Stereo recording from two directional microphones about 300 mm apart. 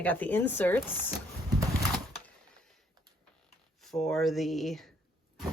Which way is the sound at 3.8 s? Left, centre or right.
Centre.